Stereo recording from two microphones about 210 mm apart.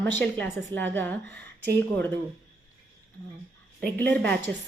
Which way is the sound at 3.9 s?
10° left (ahead or behind).